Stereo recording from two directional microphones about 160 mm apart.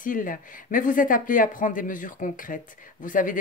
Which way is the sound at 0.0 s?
55° left (ahead or behind).